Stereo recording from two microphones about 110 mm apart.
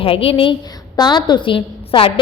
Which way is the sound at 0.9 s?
40° left (ahead or behind).